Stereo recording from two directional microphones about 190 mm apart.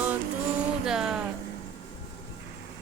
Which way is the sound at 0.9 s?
5° right (ahead or behind).